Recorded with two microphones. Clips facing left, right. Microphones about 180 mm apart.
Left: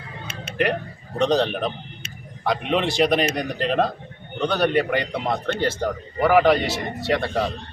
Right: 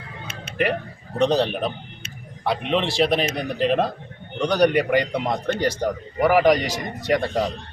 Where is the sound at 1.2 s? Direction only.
5° right (ahead or behind).